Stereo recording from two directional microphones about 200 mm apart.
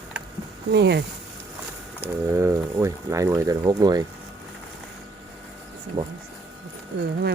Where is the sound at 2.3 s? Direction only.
15° right (ahead or behind).